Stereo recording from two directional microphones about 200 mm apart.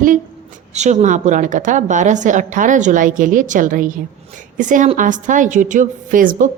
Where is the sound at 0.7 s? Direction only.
35° right (ahead or behind).